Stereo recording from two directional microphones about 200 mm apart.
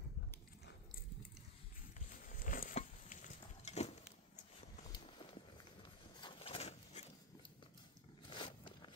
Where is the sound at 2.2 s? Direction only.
45° left (ahead or behind).